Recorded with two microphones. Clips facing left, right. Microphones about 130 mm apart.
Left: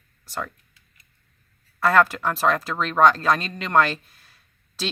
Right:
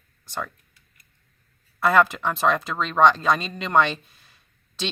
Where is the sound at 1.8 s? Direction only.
Centre (ahead or behind).